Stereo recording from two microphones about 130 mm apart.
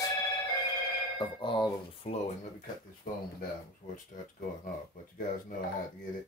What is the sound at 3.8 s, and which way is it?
Speech, 85° left.